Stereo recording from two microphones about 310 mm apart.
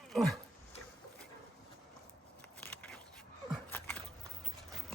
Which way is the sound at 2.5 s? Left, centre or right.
Centre.